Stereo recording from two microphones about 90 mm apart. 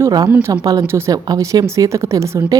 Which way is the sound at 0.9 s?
30° right (ahead or behind).